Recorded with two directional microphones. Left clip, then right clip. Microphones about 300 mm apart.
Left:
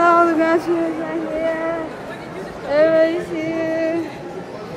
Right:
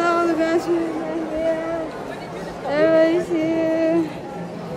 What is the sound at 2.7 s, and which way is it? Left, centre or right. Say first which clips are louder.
Speech: left 2 dB; centre.